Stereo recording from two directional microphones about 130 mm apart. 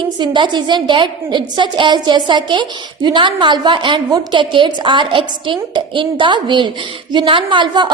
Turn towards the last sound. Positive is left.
turn(degrees=-35)  # may be behind; listen again after turning